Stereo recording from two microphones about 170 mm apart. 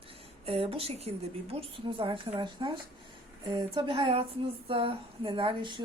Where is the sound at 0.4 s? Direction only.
35° right (ahead or behind).